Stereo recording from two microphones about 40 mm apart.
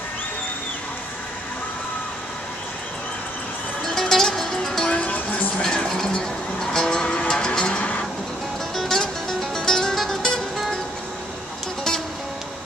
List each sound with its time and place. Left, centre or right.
3.8 s music: centre
4.8 s music: left
5.6 s music: centre
9.9 s music: centre